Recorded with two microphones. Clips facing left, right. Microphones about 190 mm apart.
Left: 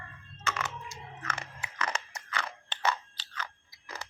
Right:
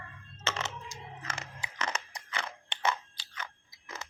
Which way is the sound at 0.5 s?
25° right (ahead or behind).